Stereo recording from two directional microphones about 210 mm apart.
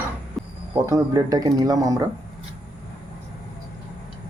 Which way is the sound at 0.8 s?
15° right (ahead or behind).